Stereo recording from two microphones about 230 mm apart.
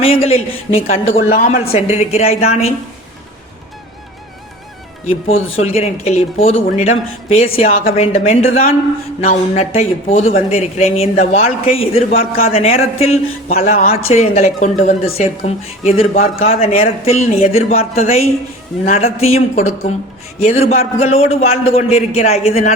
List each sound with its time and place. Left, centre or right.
0.0 s speech: left
5.3 s speech: left
5.6 s speech: left